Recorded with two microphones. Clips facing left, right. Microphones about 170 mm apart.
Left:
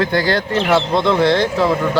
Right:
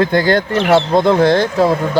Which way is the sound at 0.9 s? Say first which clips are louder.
Right 3 dB; 45° right (ahead or behind).